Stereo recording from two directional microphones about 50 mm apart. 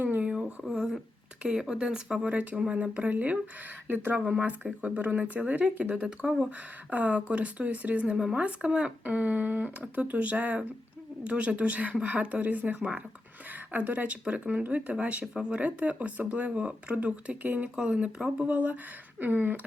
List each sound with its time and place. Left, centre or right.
0.0 s a sound: right
0.6 s a sound: centre
1.4 s speech: centre
3.8 s speech: right
6.9 s speech: right
9.0 s speech: right
17.7 s speech: right